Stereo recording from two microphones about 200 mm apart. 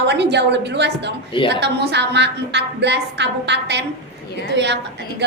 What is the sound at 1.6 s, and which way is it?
A woman's voice, 60° right (ahead or behind).